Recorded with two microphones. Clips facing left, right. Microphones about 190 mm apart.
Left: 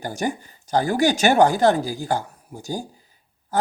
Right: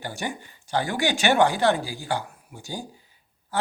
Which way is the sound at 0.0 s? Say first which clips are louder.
Left 6 dB; 40° left (ahead or behind).